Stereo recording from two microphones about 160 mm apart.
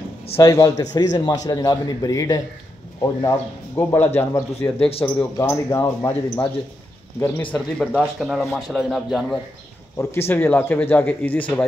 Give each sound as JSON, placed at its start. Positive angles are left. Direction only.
{"t": 0.4, "sound": "a man's voice", "side_deg": 20}
{"t": 4.7, "sound": "a man's voice", "side_deg": 35}
{"t": 5.0, "sound": "speech", "side_deg": 10}
{"t": 7.9, "sound": "speech", "side_deg": 0}
{"t": 9.9, "sound": "speech", "side_deg": 15}